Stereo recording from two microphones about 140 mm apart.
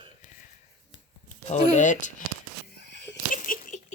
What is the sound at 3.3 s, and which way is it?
Patter, 75° left (ahead or behind).